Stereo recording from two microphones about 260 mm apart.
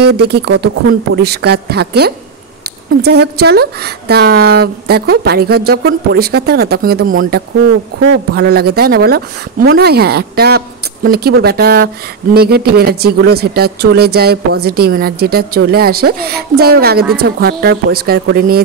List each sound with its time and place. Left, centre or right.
0.0 s speech: right